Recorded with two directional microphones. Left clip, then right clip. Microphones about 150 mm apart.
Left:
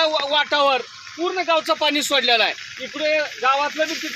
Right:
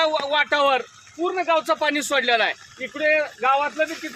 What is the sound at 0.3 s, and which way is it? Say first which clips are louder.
Speech: left 1 dB; 15° left (ahead or behind).